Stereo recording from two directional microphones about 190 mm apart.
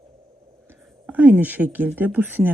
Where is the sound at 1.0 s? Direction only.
10° right (ahead or behind).